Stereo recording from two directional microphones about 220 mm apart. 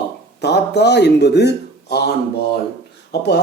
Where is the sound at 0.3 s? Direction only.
50° left (ahead or behind).